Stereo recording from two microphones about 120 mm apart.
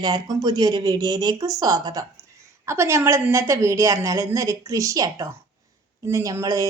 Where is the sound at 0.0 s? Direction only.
35° right (ahead or behind).